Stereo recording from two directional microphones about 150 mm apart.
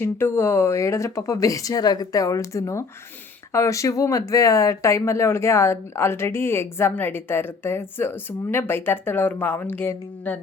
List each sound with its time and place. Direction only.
0.0 s speech: 15° left (ahead or behind)